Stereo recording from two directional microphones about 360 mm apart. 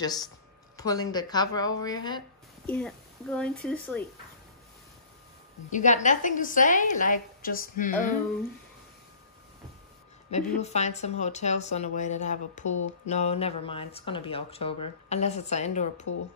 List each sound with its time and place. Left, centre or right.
0.0 s a woman's voice: centre
5.7 s speech: left
10.3 s speech: centre
12.6 s a sound: left
13.0 s speech: centre